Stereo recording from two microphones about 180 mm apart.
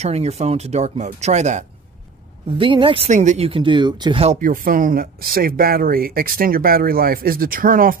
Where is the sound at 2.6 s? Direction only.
30° right (ahead or behind).